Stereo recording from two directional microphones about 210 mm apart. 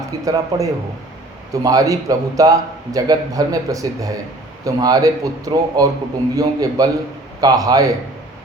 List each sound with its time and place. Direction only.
0.3 s a man's voice: 15° right (ahead or behind)